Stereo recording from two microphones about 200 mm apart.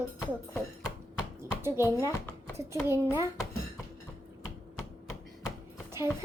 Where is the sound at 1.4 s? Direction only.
15° right (ahead or behind).